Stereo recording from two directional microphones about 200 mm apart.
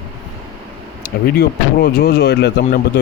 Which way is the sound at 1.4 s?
50° left (ahead or behind).